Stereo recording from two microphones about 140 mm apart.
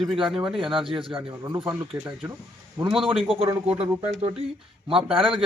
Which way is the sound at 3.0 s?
40° right (ahead or behind).